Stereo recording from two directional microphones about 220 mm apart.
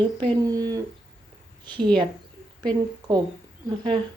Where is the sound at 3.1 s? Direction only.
20° right (ahead or behind).